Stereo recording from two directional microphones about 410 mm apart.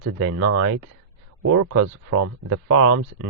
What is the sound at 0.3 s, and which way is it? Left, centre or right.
Speech, right.